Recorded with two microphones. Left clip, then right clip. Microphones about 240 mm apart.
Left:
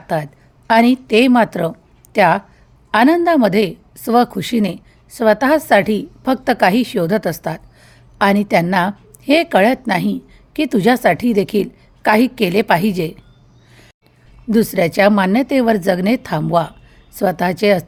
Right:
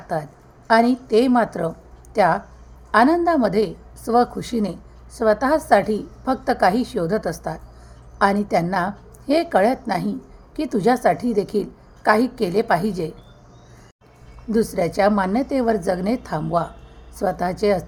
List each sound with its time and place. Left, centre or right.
0.1 s a woman's voice: left
2.9 s a woman's voice: left
14.5 s a woman's voice: left